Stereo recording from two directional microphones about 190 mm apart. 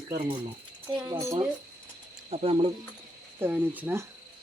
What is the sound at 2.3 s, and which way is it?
Speech, 30° right (ahead or behind).